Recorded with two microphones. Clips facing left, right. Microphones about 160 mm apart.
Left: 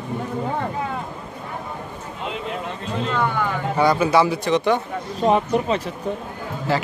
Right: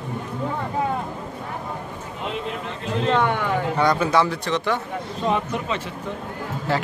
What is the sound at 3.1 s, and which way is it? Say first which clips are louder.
Speech: right 3 dB; 75° right (ahead or behind).